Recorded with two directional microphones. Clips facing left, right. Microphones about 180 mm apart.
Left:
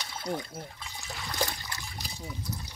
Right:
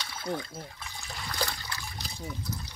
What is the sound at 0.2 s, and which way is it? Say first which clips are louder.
Speech: even; 15° left (ahead or behind).